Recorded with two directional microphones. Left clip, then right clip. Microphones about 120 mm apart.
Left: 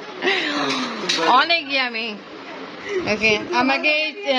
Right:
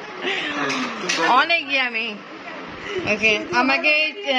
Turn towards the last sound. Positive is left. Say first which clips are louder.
# right 1 dB
turn(degrees=10)  # may be behind; listen again after turning